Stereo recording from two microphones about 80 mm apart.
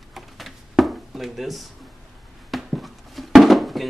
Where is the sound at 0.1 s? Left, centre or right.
Centre.